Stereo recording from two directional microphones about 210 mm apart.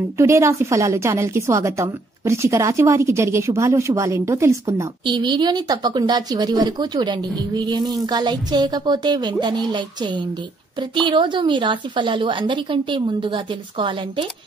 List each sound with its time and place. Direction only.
0.2 s a woman's voice: 15° right (ahead or behind)